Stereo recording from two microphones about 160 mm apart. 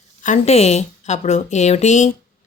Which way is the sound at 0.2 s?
45° left (ahead or behind).